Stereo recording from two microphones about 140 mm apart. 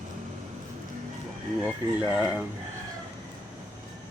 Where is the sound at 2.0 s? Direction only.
10° right (ahead or behind).